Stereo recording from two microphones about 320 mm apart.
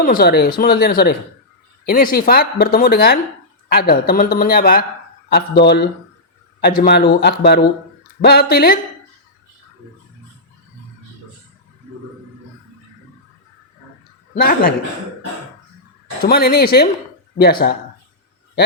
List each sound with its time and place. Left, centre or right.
0.0 s speech: left
14.3 s speech: left
16.2 s speech: left